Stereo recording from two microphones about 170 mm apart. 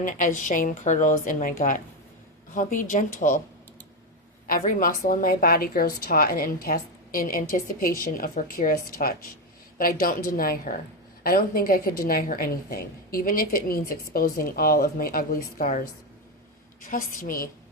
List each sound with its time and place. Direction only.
0.0 s a woman's voice: 50° left (ahead or behind)
4.4 s a woman's voice: 55° left (ahead or behind)
16.9 s a woman's voice: 55° left (ahead or behind)